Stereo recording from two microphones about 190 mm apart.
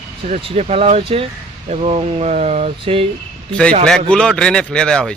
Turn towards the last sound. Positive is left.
turn(degrees=5)  # may be behind; listen again after turning